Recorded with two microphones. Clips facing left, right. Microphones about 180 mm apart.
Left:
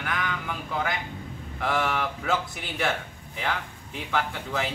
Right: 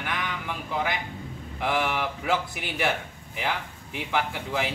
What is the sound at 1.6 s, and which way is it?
Speech, 5° right (ahead or behind).